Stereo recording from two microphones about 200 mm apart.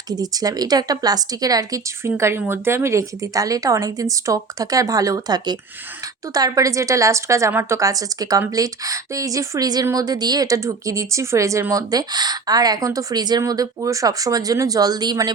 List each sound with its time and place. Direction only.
0.1 s a woman's voice: 20° right (ahead or behind)